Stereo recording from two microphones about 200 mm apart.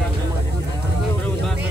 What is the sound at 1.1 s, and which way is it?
Vehicle, 5° left (ahead or behind).